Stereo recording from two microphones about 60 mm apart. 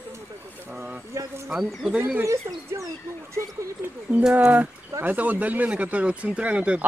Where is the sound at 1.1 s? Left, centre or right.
Right.